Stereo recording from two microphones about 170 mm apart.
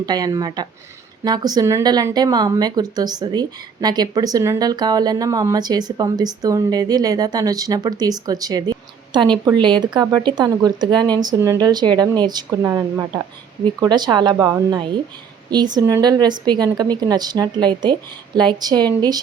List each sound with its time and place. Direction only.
0.0 s a woman's voice: 25° right (ahead or behind)